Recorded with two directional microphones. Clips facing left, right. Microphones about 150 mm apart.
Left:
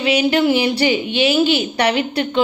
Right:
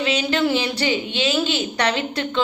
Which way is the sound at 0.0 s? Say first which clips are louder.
Left 5 dB; 15° left (ahead or behind).